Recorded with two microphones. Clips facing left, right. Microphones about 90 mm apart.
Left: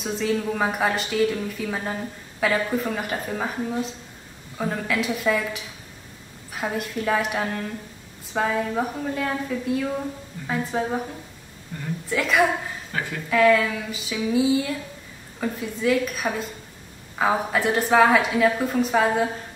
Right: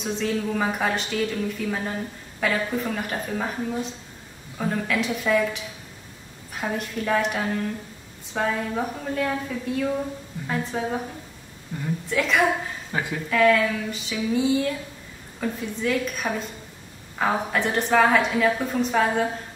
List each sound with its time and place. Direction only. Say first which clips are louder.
0.0 s a woman's voice: left 1 dB; 5° left (ahead or behind)
12.1 s a woman's voice: left 1 dB; centre (ahead or behind)
12.9 s speech: right 1 dB; 20° right (ahead or behind)
13.3 s a woman's voice: left 1 dB; centre (ahead or behind)